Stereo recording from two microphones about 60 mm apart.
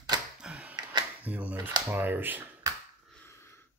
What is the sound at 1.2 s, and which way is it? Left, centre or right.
Speech, right.